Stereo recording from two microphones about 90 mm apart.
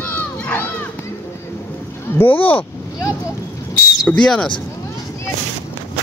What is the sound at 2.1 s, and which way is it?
Speech, 20° left (ahead or behind).